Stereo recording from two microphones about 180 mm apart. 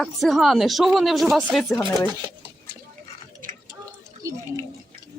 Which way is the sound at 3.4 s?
50° right (ahead or behind).